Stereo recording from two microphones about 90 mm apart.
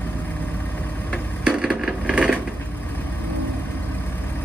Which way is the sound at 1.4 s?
10° right (ahead or behind).